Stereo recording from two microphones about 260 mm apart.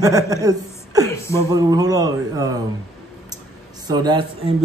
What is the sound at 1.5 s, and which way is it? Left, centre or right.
Speech, centre.